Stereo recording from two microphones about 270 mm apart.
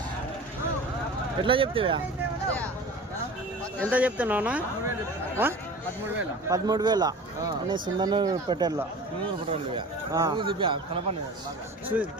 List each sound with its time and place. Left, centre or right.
1.4 s speech: centre
3.8 s speech: centre